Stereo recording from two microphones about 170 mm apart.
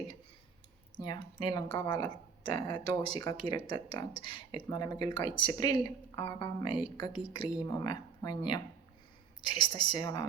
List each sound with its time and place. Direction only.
1.0 s speech: 25° left (ahead or behind)